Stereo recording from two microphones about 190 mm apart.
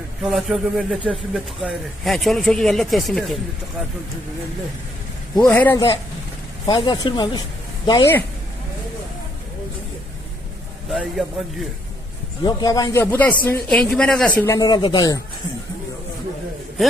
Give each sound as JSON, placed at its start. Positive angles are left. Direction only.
{"t": 0.2, "sound": "speech", "side_deg": 0}
{"t": 5.5, "sound": "speech", "side_deg": 10}
{"t": 10.8, "sound": "speech", "side_deg": 0}
{"t": 12.5, "sound": "speech", "side_deg": 20}